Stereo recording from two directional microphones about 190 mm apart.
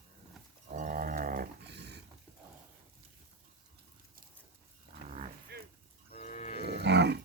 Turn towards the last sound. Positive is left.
turn(degrees=-60)  # may be behind; listen again after turning